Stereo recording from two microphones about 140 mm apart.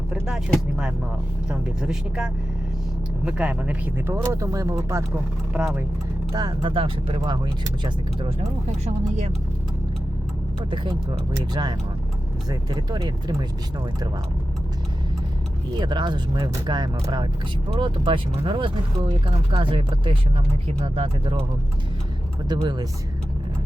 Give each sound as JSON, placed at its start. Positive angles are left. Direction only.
{"t": 0.1, "sound": "speech", "side_deg": -5}
{"t": 5.5, "sound": "speech", "side_deg": -10}
{"t": 6.3, "sound": "speech", "side_deg": -30}
{"t": 8.8, "sound": "speech", "side_deg": -50}
{"t": 10.7, "sound": "speech", "side_deg": -35}
{"t": 15.8, "sound": "speech", "side_deg": -35}
{"t": 22.4, "sound": "speech", "side_deg": -30}